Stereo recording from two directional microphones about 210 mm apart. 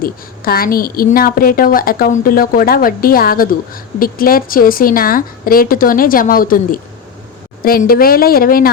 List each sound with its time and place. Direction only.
0.0 s a woman's voice: 45° left (ahead or behind)